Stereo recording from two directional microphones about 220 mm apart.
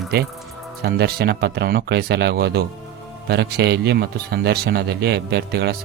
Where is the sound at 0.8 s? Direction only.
45° right (ahead or behind).